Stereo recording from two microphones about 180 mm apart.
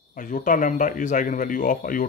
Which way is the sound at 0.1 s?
45° left (ahead or behind).